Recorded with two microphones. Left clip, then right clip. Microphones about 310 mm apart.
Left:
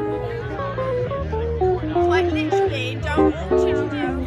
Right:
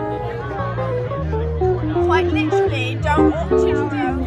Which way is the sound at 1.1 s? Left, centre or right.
Left.